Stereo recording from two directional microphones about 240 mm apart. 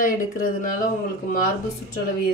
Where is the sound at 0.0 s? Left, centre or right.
Left.